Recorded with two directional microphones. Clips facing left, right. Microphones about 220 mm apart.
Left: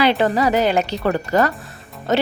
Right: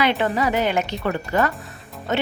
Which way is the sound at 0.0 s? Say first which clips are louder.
Left 4 dB; 35° left (ahead or behind).